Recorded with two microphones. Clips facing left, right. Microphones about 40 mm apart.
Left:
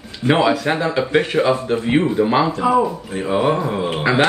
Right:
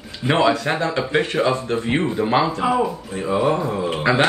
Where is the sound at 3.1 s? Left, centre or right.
Left.